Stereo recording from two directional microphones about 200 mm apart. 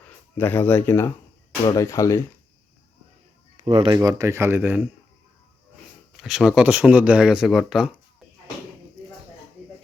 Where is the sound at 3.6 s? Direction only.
30° right (ahead or behind).